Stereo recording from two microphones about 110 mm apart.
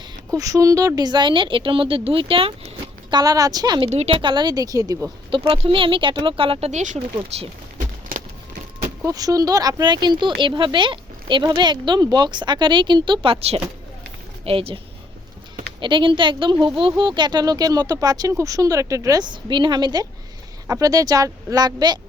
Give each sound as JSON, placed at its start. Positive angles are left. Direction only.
{"t": 0.3, "sound": "speech", "side_deg": -30}
{"t": 3.1, "sound": "speech", "side_deg": -35}
{"t": 3.8, "sound": "speech", "side_deg": -65}
{"t": 4.2, "sound": "speech", "side_deg": -45}
{"t": 5.5, "sound": "speech", "side_deg": -55}
{"t": 9.0, "sound": "speech", "side_deg": -30}
{"t": 15.8, "sound": "speech", "side_deg": -45}